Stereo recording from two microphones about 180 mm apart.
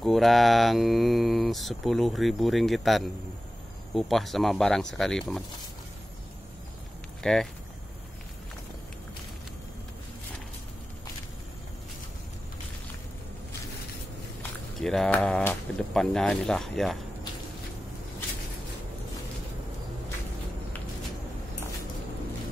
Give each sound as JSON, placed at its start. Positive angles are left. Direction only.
{"t": 0.0, "sound": "speech", "side_deg": 0}
{"t": 7.2, "sound": "speech", "side_deg": 5}
{"t": 14.8, "sound": "speech", "side_deg": 5}